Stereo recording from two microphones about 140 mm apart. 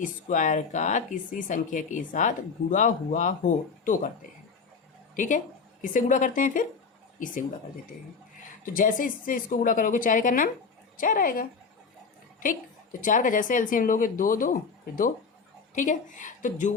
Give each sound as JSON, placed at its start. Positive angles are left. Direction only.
{"t": 0.0, "sound": "speech", "side_deg": 65}
{"t": 5.1, "sound": "a woman's voice", "side_deg": 65}
{"t": 8.6, "sound": "a woman's voice", "side_deg": 85}
{"t": 12.4, "sound": "a woman's voice", "side_deg": 75}
{"t": 15.7, "sound": "a woman's voice", "side_deg": 65}